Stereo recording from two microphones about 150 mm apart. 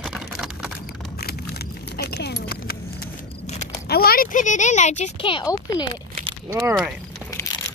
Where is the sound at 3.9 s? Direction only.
85° left; by 5.1 s 50° left (ahead or behind).